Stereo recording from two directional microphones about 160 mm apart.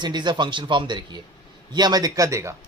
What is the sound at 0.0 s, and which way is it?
Speech, 30° right (ahead or behind).